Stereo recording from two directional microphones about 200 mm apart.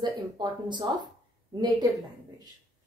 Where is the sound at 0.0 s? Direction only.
20° right (ahead or behind).